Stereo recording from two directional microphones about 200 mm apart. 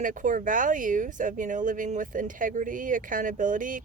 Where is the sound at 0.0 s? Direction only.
40° right (ahead or behind).